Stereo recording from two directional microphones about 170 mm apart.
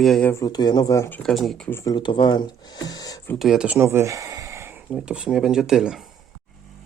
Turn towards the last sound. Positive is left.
turn(degrees=-5)  # may be behind; listen again after turning